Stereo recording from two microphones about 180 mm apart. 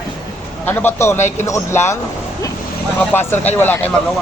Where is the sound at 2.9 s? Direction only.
10° left (ahead or behind).